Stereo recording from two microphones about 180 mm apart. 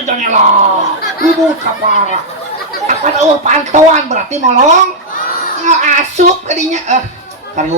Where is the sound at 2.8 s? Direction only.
40° right (ahead or behind).